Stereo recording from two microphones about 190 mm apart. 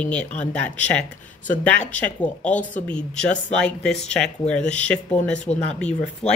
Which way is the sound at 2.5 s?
40° left (ahead or behind).